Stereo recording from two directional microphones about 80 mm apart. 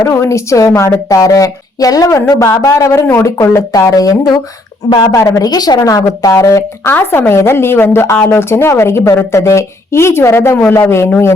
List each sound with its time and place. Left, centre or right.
0.1 s speech: left
3.7 s speech: left
4.9 s a woman's voice: left
5.1 s speech: left